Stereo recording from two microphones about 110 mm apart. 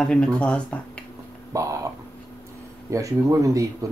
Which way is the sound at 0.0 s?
10° left (ahead or behind).